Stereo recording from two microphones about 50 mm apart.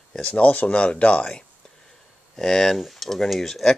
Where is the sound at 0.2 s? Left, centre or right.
Left.